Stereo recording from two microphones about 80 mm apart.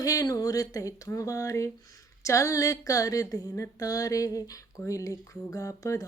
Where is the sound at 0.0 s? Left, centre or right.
Left.